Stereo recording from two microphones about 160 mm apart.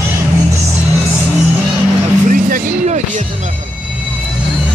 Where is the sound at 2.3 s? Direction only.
55° right (ahead or behind).